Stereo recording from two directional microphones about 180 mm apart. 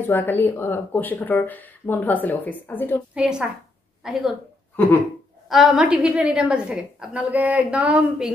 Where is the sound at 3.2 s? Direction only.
5° right (ahead or behind).